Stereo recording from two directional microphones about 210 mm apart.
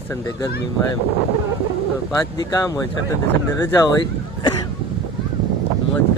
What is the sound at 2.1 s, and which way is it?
Speech, 20° left (ahead or behind).